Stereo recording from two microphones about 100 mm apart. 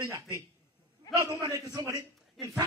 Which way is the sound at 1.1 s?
35° right (ahead or behind).